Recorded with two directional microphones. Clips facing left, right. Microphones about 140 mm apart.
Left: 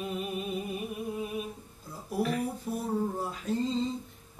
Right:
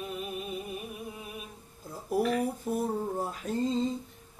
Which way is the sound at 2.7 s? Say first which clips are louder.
Left 1 dB; 45° right (ahead or behind).